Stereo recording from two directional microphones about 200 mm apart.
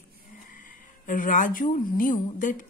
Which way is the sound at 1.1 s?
40° left (ahead or behind).